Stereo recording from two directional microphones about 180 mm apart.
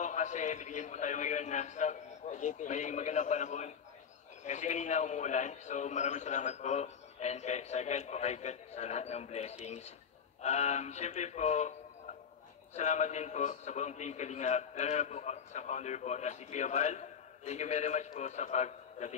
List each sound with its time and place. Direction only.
0.0 s a man's voice: 40° left (ahead or behind)
12.7 s a man's voice: 40° left (ahead or behind)